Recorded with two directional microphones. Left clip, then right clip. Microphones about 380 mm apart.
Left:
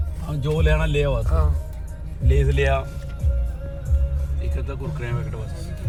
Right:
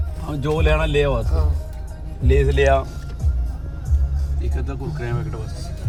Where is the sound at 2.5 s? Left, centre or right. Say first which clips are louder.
Right 5 dB; centre.